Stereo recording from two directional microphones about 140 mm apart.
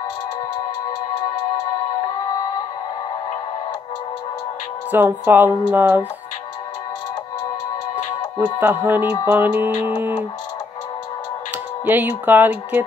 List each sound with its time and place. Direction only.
4.9 s speech: 15° right (ahead or behind)
8.4 s speech: 15° right (ahead or behind)
11.8 s speech: 15° right (ahead or behind)